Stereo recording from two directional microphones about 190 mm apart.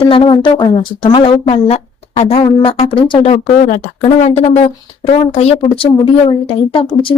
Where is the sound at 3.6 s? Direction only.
40° left (ahead or behind).